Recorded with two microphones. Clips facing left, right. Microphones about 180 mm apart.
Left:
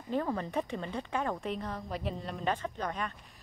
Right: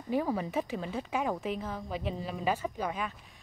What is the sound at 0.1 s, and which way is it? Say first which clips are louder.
A woman's voice: right 2 dB; 10° right (ahead or behind).